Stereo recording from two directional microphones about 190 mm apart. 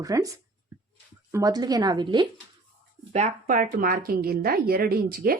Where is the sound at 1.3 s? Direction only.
20° right (ahead or behind).